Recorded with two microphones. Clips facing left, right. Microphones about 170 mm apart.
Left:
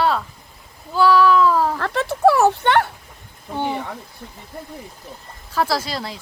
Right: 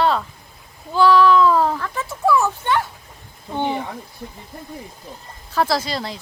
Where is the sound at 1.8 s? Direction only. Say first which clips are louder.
Left 6 dB; 75° left (ahead or behind).